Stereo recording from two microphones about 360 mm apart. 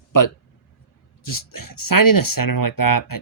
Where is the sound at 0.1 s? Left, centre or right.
Left.